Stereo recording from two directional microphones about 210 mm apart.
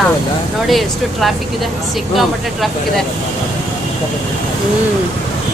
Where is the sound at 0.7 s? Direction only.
Centre (ahead or behind).